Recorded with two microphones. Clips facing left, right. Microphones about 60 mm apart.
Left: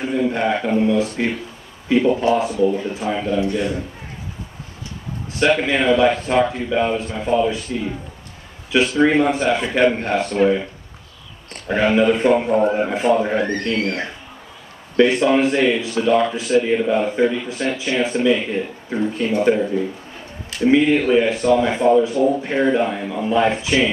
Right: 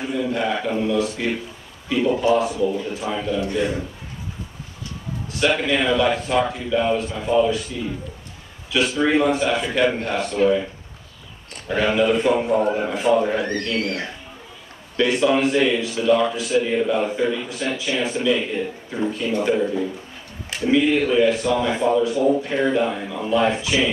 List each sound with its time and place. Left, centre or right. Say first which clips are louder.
0.3 s a man's voice: left 3 dB; left
5.4 s a man's voice: left 3 dB; left
11.6 s a man's voice: left 3 dB; left